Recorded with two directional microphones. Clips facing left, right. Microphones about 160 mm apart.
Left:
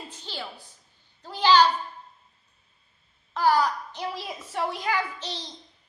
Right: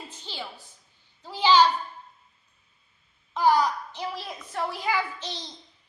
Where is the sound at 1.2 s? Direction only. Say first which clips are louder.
Even; 10° right (ahead or behind).